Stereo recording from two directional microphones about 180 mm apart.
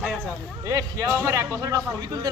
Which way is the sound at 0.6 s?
15° right (ahead or behind).